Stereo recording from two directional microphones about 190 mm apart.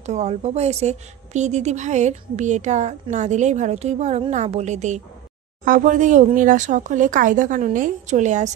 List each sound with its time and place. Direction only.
0.0 s a woman's voice: 35° right (ahead or behind)